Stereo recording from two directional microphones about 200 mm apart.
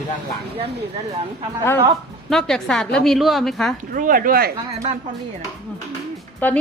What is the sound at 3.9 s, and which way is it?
Speech, 45° right (ahead or behind).